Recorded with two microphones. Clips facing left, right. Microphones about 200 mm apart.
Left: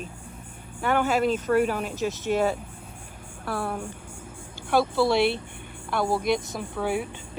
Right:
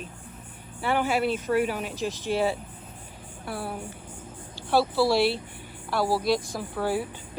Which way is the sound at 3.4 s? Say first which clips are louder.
Left 4 dB; 55° left (ahead or behind).